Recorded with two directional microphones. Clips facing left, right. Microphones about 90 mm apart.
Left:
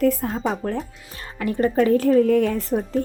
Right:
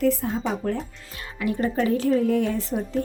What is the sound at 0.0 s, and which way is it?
A woman's voice, 45° left (ahead or behind).